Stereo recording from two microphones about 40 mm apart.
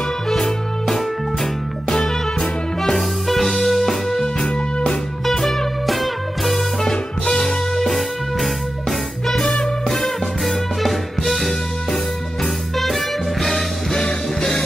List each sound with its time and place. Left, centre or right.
0.3 s music: centre
2.8 s music: centre
4.4 s music: centre
5.2 s music: centre
6.8 s music: centre
7.7 s music: centre
9.4 s music: centre
10.4 s music: centre
12.7 s music: centre
13.9 s music: centre